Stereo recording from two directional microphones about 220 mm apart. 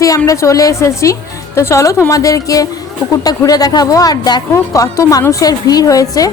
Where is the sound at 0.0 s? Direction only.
15° left (ahead or behind).